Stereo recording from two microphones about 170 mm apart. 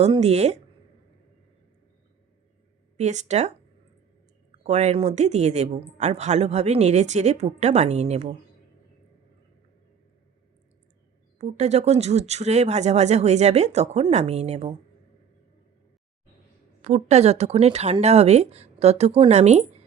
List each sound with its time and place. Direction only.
0.0 s speech: 40° right (ahead or behind)
3.0 s speech: 45° right (ahead or behind)
4.6 s speech: 40° right (ahead or behind)
11.3 s speech: 40° right (ahead or behind)
16.8 s speech: 40° right (ahead or behind)